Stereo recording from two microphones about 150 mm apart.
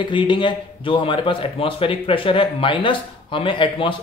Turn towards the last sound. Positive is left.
turn(degrees=35)  # may be behind; listen again after turning